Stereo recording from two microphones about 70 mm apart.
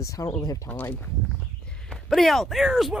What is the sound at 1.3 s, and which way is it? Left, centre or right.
Walk, centre.